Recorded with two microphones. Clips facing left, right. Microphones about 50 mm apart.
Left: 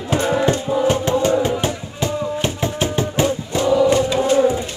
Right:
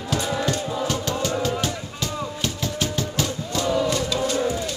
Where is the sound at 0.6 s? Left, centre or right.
Centre.